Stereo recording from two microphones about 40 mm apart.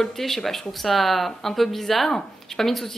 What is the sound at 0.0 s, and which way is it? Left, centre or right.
A woman's voice, centre.